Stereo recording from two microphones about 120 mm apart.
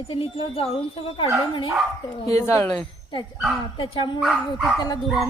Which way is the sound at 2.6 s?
10° left (ahead or behind).